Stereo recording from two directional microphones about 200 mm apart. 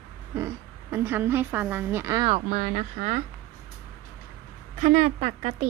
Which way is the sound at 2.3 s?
35° right (ahead or behind).